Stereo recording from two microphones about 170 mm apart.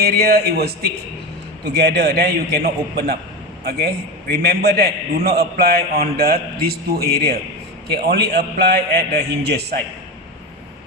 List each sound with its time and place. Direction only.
0.0 s a man's voice: 70° right (ahead or behind)